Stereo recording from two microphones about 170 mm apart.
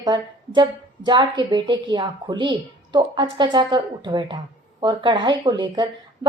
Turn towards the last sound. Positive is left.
turn(degrees=-25)  # may be behind; listen again after turning